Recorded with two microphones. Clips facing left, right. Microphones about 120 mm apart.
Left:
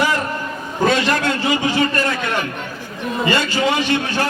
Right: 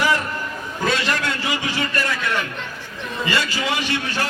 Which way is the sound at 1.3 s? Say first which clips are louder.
Left 6 dB; 25° left (ahead or behind).